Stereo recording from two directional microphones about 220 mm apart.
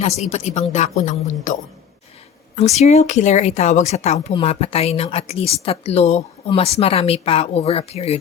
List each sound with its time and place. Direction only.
0.0 s a woman's voice: 30° left (ahead or behind)
2.6 s a woman's voice: 30° left (ahead or behind)